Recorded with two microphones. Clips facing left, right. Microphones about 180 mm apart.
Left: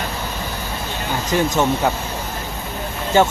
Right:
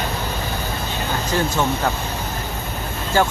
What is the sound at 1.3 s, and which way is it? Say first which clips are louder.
Speech: left 3 dB; 15° left (ahead or behind).